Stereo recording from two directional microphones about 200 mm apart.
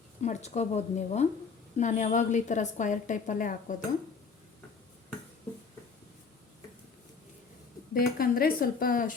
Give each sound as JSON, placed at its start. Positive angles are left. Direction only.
{"t": 0.2, "sound": "a woman's voice", "side_deg": 35}
{"t": 7.9, "sound": "a woman's voice", "side_deg": 45}